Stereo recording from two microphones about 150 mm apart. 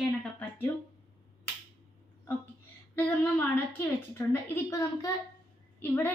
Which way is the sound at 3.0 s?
10° left (ahead or behind).